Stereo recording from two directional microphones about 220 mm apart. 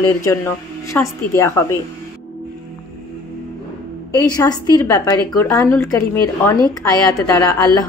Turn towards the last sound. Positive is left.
turn(degrees=15)  # may be behind; listen again after turning